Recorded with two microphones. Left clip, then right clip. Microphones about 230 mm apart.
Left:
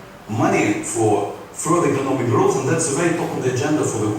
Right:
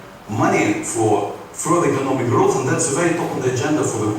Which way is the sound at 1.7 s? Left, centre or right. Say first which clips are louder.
Right 1 dB; centre.